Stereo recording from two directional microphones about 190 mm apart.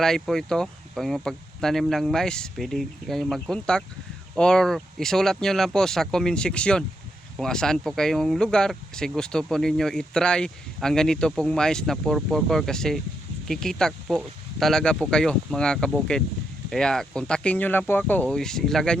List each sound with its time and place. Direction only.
0.0 s speech: centre (ahead or behind)